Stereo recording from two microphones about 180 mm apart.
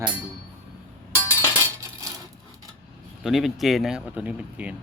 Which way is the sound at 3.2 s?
Centre (ahead or behind).